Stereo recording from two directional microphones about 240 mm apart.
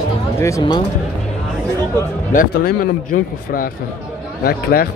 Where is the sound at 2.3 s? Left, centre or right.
Left.